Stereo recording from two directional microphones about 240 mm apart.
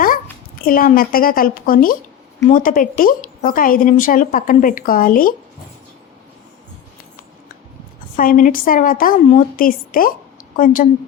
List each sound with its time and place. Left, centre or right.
0.6 s speech: left
8.1 s speech: left